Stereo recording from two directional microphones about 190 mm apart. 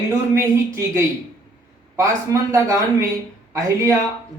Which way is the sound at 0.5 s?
15° right (ahead or behind).